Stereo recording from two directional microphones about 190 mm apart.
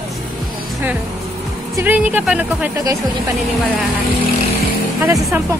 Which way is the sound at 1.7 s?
10° right (ahead or behind).